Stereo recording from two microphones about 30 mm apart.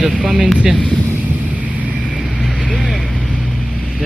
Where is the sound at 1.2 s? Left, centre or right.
Right.